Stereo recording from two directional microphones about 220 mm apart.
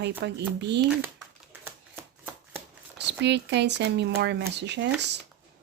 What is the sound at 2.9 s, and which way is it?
Speech, 50° right (ahead or behind).